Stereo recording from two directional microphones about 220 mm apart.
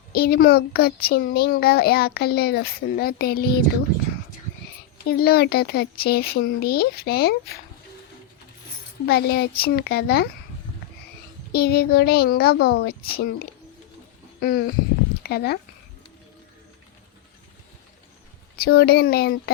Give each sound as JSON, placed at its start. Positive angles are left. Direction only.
{"t": 0.1, "sound": "a child's voice", "side_deg": 45}
{"t": 5.0, "sound": "a child's voice", "side_deg": 45}
{"t": 9.0, "sound": "a child's voice", "side_deg": 45}
{"t": 11.5, "sound": "a child's voice", "side_deg": 45}
{"t": 18.6, "sound": "a child's voice", "side_deg": 45}